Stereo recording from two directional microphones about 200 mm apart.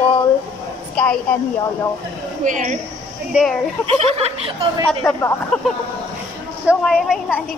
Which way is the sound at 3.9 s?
30° right (ahead or behind).